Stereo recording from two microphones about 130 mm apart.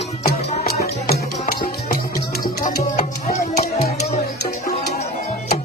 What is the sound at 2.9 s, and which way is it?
Music, 60° left (ahead or behind).